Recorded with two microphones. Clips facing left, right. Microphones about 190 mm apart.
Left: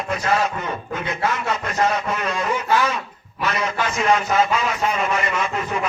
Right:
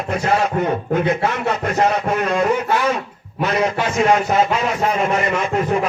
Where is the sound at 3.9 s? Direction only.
50° right (ahead or behind).